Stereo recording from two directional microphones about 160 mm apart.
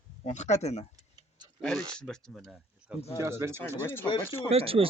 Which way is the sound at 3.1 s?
15° right (ahead or behind).